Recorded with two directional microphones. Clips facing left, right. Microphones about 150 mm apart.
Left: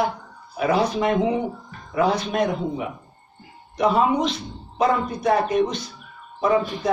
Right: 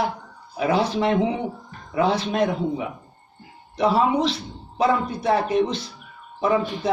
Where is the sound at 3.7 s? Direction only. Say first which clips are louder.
Even; 30° right (ahead or behind).